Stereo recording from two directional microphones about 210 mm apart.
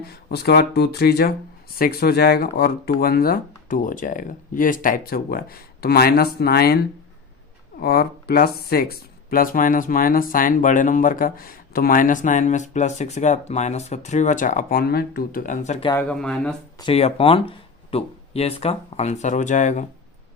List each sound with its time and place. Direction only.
0.0 s speech: 50° left (ahead or behind); by 15.9 s 35° left (ahead or behind)
16.0 s speech: 5° left (ahead or behind)
16.7 s speech: 25° left (ahead or behind)